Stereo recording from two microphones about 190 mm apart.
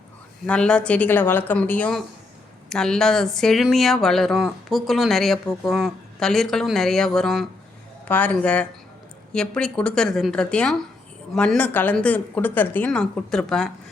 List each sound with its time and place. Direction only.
0.4 s speech: 5° left (ahead or behind)